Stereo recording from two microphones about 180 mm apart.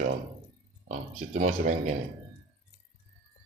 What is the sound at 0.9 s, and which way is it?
Speech, 40° right (ahead or behind).